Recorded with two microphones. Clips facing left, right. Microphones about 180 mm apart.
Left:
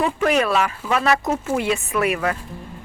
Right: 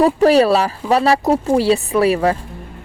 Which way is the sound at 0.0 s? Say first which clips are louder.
Right 8 dB; 35° right (ahead or behind).